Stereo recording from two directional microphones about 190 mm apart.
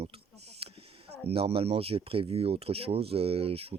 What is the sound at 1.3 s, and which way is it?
Speech, 30° right (ahead or behind).